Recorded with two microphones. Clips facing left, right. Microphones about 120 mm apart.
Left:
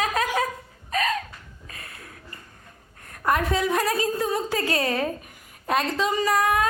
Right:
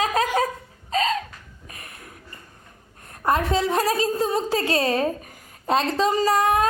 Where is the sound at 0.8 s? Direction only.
25° right (ahead or behind).